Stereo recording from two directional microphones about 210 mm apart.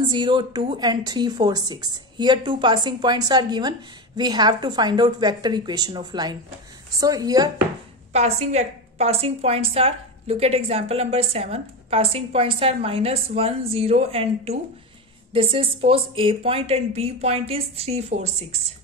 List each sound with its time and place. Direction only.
0.1 s a woman's voice: 25° right (ahead or behind)
8.1 s a woman's voice: 30° right (ahead or behind)